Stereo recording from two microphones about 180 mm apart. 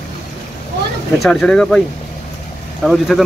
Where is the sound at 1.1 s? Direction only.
Centre (ahead or behind).